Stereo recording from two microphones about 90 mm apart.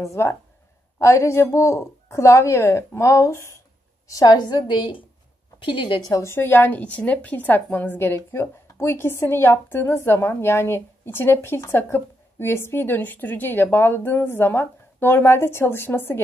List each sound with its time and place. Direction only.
0.0 s a woman's voice: 30° left (ahead or behind); by 6.0 s 65° left (ahead or behind)
6.0 s a woman's voice: 40° left (ahead or behind)
6.3 s a woman's voice: 20° left (ahead or behind)